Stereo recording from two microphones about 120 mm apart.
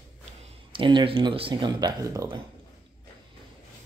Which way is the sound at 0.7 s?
45° right (ahead or behind).